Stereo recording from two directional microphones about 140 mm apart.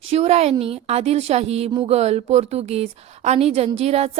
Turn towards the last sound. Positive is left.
turn(degrees=-50)  # may be behind; listen again after turning